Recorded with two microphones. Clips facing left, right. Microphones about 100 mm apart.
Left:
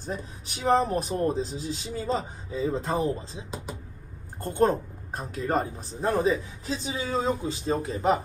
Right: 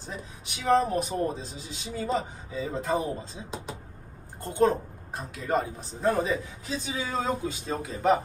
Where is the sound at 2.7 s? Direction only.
30° left (ahead or behind).